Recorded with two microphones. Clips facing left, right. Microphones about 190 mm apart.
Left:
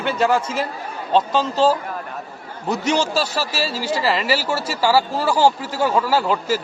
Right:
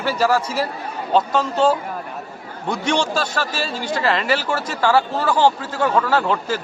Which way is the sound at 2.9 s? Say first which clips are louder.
Even; 5° left (ahead or behind).